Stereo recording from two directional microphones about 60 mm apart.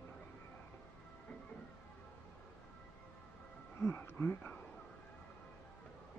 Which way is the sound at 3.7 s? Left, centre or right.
Left.